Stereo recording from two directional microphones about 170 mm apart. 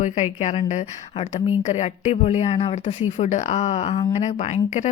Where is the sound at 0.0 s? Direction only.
45° left (ahead or behind).